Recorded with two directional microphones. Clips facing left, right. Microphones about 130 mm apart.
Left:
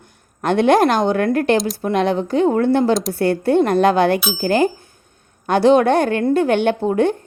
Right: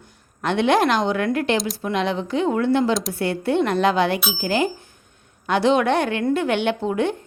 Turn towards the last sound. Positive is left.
turn(degrees=45)  # may be behind; listen again after turning